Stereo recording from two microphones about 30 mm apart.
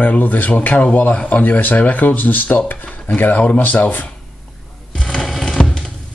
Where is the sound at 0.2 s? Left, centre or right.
Left.